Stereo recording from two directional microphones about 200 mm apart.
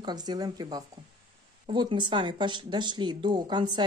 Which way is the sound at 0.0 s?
20° right (ahead or behind).